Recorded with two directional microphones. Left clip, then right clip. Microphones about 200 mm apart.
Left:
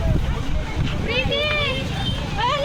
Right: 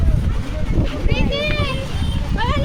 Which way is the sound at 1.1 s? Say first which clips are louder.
Left 1 dB; 20° right (ahead or behind).